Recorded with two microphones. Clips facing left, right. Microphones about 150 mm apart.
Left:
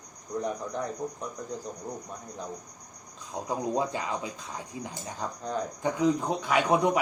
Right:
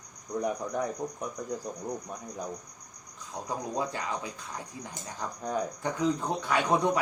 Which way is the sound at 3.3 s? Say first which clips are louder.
Left 4 dB; 20° left (ahead or behind).